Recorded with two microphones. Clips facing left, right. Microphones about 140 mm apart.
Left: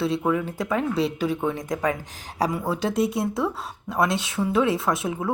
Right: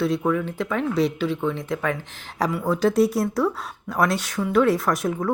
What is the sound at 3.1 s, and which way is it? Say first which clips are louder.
Speech: right 3 dB; 20° left (ahead or behind).